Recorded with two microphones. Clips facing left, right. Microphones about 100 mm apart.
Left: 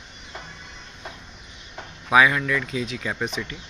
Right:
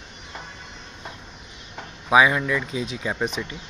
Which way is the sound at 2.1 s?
20° right (ahead or behind).